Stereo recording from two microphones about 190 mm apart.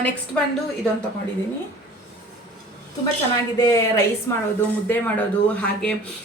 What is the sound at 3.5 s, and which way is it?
A woman's voice, 15° left (ahead or behind).